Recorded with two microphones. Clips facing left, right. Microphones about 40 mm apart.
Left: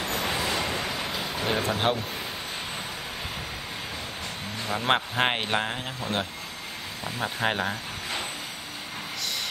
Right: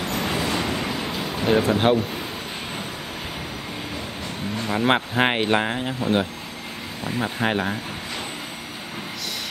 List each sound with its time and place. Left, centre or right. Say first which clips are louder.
0.3 s vehicle: right 4 dB; right
0.8 s vehicle: right 4 dB; centre
1.3 s speech: right 8 dB; centre
4.6 s speech: right 4 dB; centre